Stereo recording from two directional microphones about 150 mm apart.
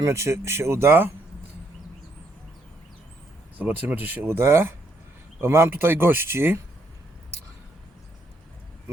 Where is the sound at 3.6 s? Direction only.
10° right (ahead or behind).